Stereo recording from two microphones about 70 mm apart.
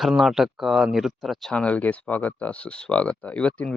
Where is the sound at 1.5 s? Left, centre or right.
Centre.